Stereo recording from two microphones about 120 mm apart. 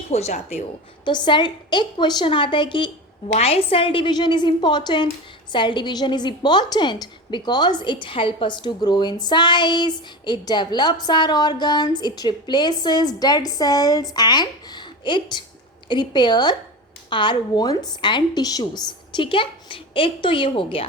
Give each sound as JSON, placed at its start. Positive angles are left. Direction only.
{"t": 0.1, "sound": "speech", "side_deg": 65}
{"t": 1.0, "sound": "a woman's voice", "side_deg": 40}
{"t": 3.3, "sound": "a woman's voice", "side_deg": 55}